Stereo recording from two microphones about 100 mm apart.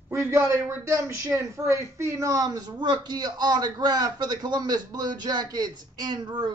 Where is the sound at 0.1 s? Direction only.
25° right (ahead or behind).